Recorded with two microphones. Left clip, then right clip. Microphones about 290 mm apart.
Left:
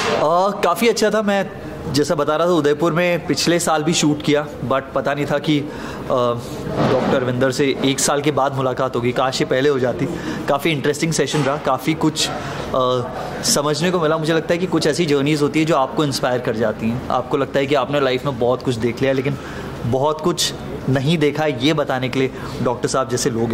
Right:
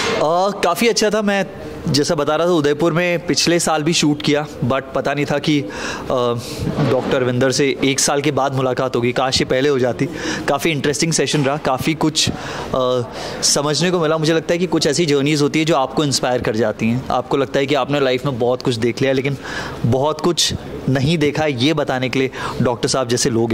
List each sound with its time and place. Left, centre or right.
0.2 s a man's voice: right
7.2 s a man's voice: right